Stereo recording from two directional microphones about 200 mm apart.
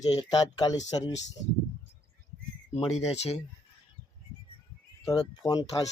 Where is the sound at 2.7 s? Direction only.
30° left (ahead or behind).